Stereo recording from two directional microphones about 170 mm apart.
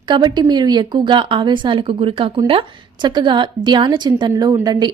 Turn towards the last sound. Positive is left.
turn(degrees=-25)  # may be behind; listen again after turning